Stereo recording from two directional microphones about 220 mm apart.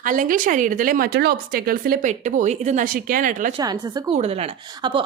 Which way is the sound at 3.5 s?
20° right (ahead or behind).